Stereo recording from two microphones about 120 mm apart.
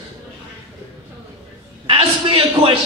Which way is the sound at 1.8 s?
50° right (ahead or behind).